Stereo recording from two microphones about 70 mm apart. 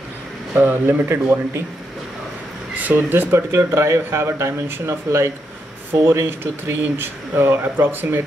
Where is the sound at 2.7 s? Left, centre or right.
Right.